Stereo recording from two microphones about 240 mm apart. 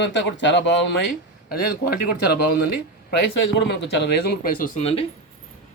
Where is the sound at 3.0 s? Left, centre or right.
Left.